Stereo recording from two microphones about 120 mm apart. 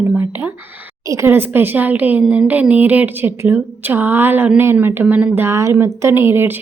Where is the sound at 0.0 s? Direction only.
15° right (ahead or behind).